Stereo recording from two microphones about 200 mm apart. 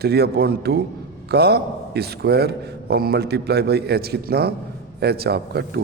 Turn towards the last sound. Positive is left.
turn(degrees=-55)  # may be behind; listen again after turning